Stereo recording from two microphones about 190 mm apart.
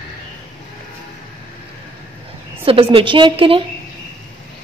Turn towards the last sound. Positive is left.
turn(degrees=-30)  # may be behind; listen again after turning